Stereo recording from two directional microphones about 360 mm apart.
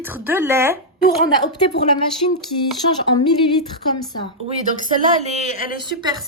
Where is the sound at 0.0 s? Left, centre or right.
Centre.